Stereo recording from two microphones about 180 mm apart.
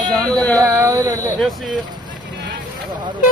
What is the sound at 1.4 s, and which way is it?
Speech, centre (ahead or behind).